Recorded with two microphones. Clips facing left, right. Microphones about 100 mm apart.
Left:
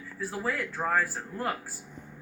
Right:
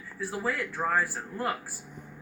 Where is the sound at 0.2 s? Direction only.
20° right (ahead or behind).